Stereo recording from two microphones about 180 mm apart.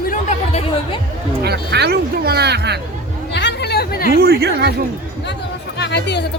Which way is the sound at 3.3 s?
70° left (ahead or behind).